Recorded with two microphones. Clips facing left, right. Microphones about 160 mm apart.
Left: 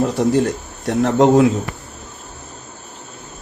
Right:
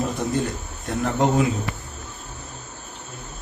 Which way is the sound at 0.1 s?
90° left.